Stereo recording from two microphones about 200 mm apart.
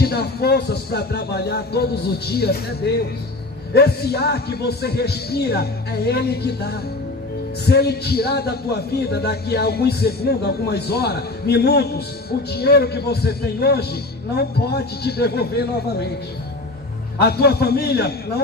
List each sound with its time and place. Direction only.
0.0 s a man's voice: 50° left (ahead or behind)
17.2 s a man's voice: 50° left (ahead or behind)